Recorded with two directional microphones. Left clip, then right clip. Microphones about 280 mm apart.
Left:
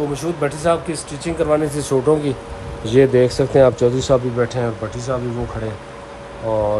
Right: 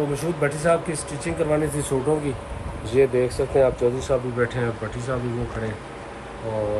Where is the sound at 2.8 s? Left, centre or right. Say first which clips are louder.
Left 6 dB; left.